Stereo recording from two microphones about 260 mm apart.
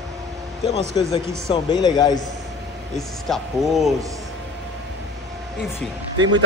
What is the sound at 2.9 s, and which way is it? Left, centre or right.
Speech, centre.